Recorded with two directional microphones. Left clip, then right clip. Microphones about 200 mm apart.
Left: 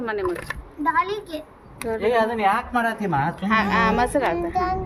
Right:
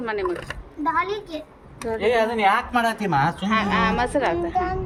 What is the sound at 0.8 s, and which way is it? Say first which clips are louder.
Speech: left 1 dB; 60° left (ahead or behind).